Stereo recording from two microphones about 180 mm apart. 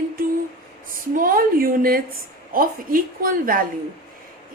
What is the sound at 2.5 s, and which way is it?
A woman's voice, 50° right (ahead or behind).